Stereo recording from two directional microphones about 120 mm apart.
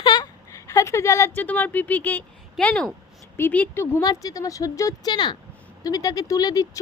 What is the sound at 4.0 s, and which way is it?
Speech, 30° left (ahead or behind).